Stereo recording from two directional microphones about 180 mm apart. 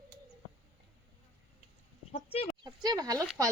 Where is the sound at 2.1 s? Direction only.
35° left (ahead or behind).